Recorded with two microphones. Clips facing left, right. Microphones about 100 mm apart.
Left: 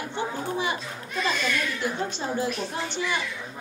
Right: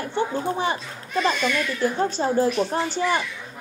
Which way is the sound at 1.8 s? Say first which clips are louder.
Right 7 dB; 35° right (ahead or behind).